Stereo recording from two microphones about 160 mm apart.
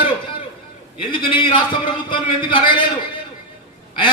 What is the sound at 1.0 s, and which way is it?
A man's voice, 30° left (ahead or behind).